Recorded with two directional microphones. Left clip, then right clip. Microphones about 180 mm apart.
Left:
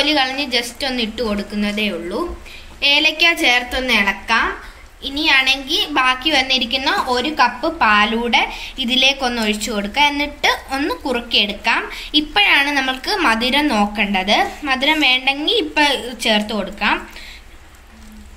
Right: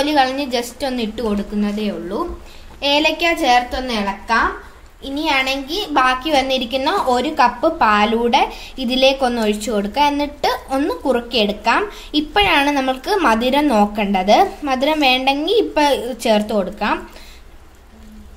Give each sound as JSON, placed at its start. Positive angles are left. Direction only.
{"t": 0.0, "sound": "speech", "side_deg": -45}
{"t": 3.8, "sound": "a woman's voice", "side_deg": -25}
{"t": 5.0, "sound": "a woman's voice", "side_deg": -40}